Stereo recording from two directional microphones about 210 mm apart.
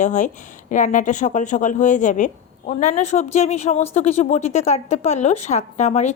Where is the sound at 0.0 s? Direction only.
35° left (ahead or behind).